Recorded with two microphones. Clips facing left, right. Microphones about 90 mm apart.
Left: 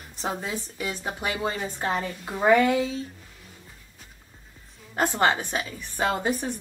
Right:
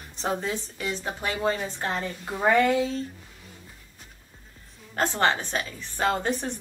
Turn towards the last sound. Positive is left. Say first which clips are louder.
# left 1 dB
turn(degrees=5)  # may be behind; listen again after turning